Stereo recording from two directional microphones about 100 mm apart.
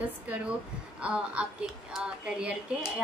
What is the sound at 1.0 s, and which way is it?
A woman's voice, 10° right (ahead or behind).